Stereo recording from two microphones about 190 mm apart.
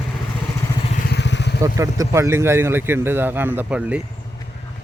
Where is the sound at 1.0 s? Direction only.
65° left (ahead or behind).